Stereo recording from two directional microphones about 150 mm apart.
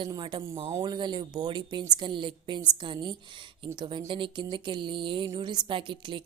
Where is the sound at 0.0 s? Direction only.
30° right (ahead or behind).